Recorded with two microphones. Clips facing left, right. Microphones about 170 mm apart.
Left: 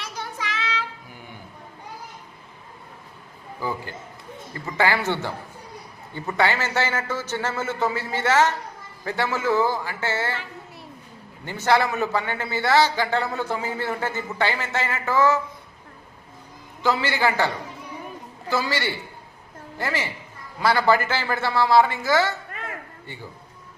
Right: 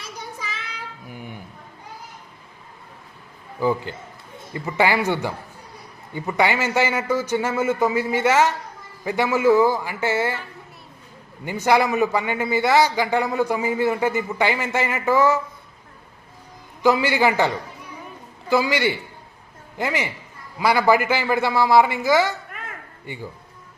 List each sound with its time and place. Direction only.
0.0 s child singing: 80° left
3.9 s a man's voice: 20° right (ahead or behind)
11.4 s a man's voice: 15° right (ahead or behind)
16.8 s a man's voice: 15° right (ahead or behind)